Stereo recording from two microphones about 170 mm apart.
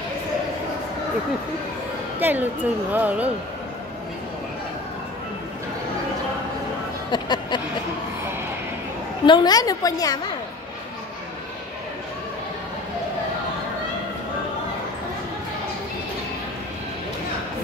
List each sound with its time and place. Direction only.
2.1 s speech: 10° right (ahead or behind)
7.1 s a woman's voice: 25° left (ahead or behind)
9.2 s a woman's voice: 25° left (ahead or behind)